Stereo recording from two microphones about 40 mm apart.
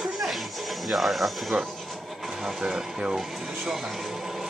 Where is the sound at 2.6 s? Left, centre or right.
Right.